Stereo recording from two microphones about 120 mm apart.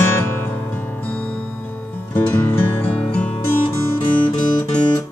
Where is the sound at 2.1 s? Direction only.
15° left (ahead or behind).